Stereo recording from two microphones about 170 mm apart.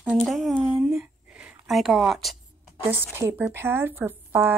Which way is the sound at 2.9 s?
15° right (ahead or behind).